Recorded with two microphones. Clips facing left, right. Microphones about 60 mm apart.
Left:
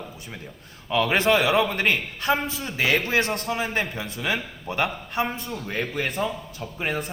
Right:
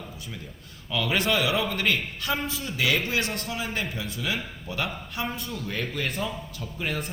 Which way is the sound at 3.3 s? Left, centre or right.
Left.